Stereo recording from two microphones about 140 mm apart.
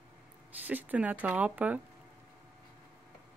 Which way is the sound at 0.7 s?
10° right (ahead or behind).